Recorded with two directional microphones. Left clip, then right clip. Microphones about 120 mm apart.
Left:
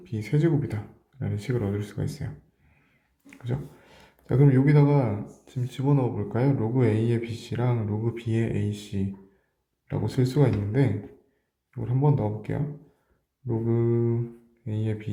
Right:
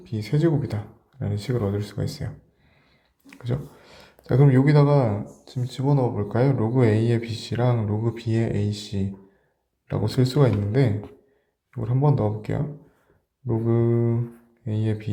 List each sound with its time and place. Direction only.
0.0 s speech: 25° right (ahead or behind)
3.2 s a sound: 30° right (ahead or behind)
4.4 s speech: 30° right (ahead or behind)
14.6 s speech: 35° right (ahead or behind)